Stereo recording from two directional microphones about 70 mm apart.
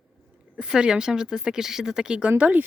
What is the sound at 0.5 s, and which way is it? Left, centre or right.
Speech, centre.